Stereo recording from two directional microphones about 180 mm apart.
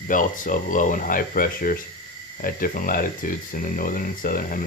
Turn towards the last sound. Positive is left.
turn(degrees=50)  # may be behind; listen again after turning